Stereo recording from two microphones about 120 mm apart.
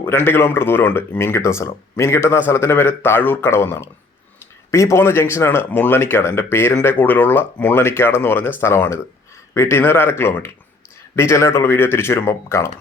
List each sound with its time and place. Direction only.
0.0 s speech: 20° left (ahead or behind)